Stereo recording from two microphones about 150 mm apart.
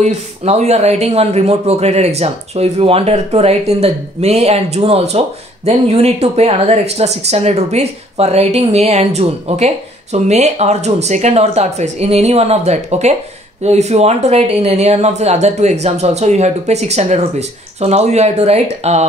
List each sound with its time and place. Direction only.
0.0 s speech: 45° right (ahead or behind)